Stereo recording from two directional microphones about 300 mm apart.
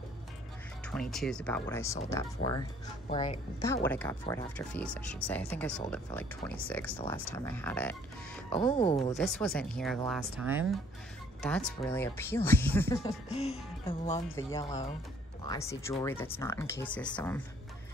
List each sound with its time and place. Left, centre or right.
1.1 s speech: centre
3.1 s speech: centre
8.7 s speech: left
9.2 s speech: centre
13.3 s speech: centre
14.3 s speech: centre